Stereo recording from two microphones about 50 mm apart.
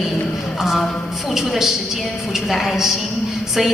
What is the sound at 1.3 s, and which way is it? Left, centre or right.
A woman's voice, centre.